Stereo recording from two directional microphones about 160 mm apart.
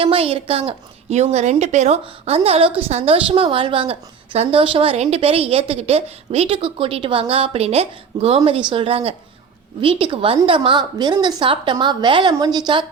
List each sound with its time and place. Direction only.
0.0 s a woman's voice: 35° right (ahead or behind)